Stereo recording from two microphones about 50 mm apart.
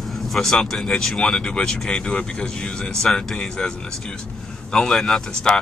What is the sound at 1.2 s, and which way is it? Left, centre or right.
Speech, centre.